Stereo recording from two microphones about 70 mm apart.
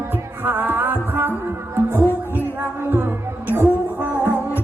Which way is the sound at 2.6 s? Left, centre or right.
Right.